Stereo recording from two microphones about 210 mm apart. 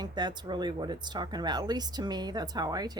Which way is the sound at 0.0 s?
20° right (ahead or behind).